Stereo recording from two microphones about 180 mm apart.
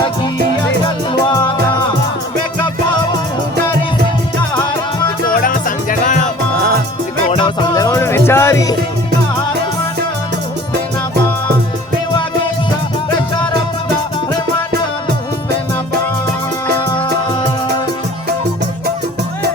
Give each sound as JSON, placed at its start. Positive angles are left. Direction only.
{"t": 1.3, "sound": "music", "side_deg": 20}
{"t": 4.5, "sound": "music", "side_deg": 25}
{"t": 5.3, "sound": "music", "side_deg": 50}
{"t": 7.3, "sound": "music", "side_deg": 30}